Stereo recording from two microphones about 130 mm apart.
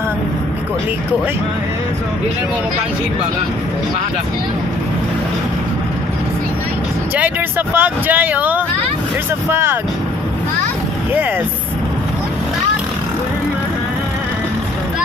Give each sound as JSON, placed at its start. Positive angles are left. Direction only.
{"t": 7.2, "sound": "speech", "side_deg": -15}